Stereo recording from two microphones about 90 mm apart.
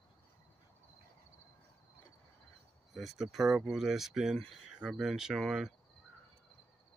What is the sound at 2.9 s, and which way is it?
Speech, centre (ahead or behind).